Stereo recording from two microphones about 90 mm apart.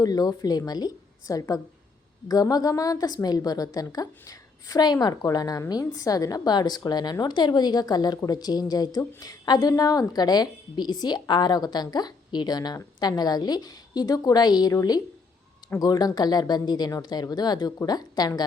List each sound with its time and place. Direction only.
0.0 s a woman's voice: 45° left (ahead or behind)